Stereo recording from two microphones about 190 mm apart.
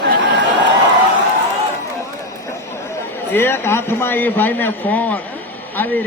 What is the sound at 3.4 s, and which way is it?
A man's voice, 10° left (ahead or behind).